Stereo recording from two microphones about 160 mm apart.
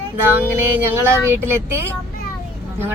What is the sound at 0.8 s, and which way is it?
Speech, 15° right (ahead or behind).